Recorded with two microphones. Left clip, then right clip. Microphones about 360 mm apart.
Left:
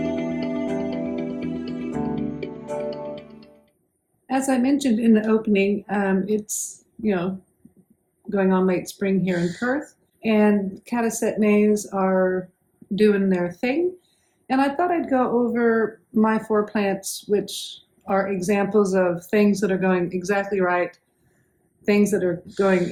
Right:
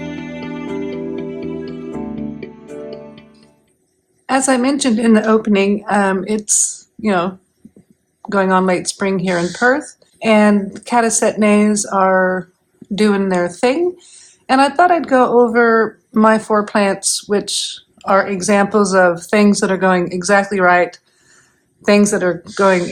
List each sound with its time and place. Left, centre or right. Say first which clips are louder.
0.0 s music: left 2 dB; centre
4.3 s speech: right 7 dB; right
8.3 s speech: right 7 dB; right